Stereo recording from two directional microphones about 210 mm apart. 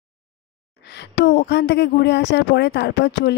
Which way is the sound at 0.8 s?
55° left (ahead or behind).